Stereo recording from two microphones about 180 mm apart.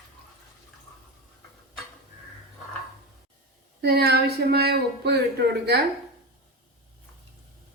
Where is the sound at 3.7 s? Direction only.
65° right (ahead or behind).